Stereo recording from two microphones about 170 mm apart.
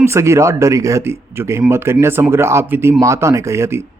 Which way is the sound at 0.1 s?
15° right (ahead or behind).